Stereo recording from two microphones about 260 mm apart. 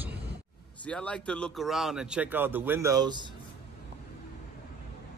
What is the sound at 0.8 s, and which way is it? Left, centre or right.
Speech, centre.